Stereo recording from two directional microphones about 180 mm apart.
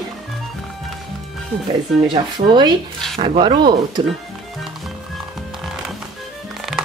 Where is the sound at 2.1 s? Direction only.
25° right (ahead or behind).